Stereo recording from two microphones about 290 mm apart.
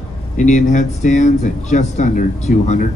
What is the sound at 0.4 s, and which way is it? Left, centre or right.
Speech, left.